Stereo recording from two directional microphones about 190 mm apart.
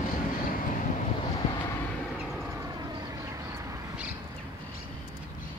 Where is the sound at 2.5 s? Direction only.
15° right (ahead or behind).